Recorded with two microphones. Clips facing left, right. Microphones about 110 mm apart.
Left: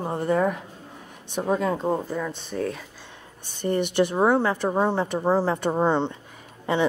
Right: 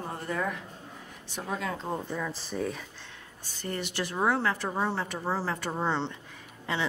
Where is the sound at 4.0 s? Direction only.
20° left (ahead or behind).